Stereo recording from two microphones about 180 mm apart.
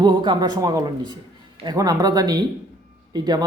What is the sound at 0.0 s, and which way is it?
Speech, 25° right (ahead or behind).